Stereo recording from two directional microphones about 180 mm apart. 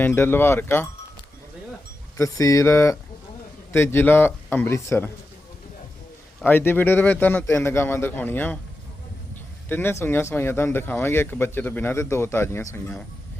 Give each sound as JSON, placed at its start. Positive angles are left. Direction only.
{"t": 0.0, "sound": "speech", "side_deg": 10}
{"t": 2.1, "sound": "speech", "side_deg": 20}
{"t": 6.4, "sound": "speech", "side_deg": 10}
{"t": 9.6, "sound": "speech", "side_deg": 10}